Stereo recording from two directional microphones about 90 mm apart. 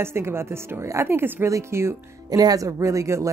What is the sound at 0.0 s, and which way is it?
A woman's voice, 30° right (ahead or behind).